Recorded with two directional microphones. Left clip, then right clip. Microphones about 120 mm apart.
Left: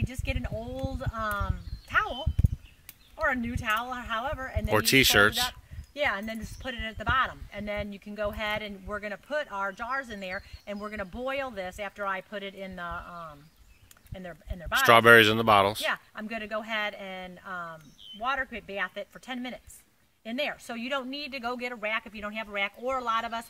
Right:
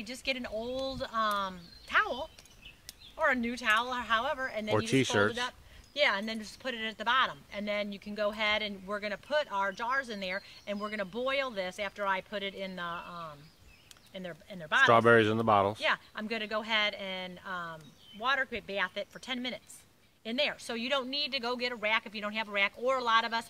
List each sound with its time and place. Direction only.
0.0 s speech: 15° right (ahead or behind)
3.2 s speech: 15° right (ahead or behind)
4.8 s speech: 25° left (ahead or behind)
5.9 s speech: 25° right (ahead or behind)
14.9 s speech: 35° left (ahead or behind)
15.8 s speech: 25° right (ahead or behind)